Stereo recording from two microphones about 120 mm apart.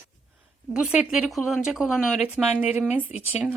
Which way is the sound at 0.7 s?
10° right (ahead or behind).